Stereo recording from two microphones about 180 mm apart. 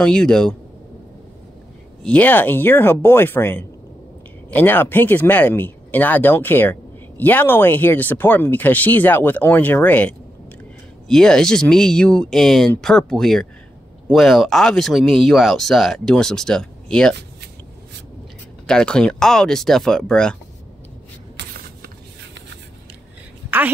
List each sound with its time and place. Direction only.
0.0 s speech: 5° left (ahead or behind)
2.0 s speech: 10° left (ahead or behind)
18.7 s speech: 5° left (ahead or behind)
21.4 s a sound: 70° right (ahead or behind)